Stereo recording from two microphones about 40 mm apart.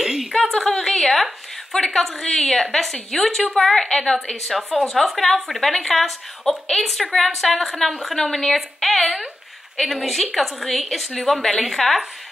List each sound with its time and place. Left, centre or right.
0.0 s a sound: centre
0.3 s a woman's voice: centre
1.7 s a woman's voice: left
2.5 s a woman's voice: centre